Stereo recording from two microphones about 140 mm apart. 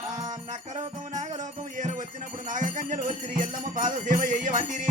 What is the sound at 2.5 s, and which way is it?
Jingle bell, 65° right (ahead or behind).